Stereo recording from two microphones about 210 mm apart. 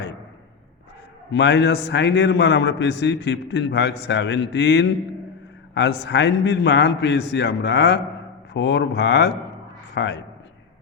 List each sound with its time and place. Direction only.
1.3 s a man's voice: 55° left (ahead or behind)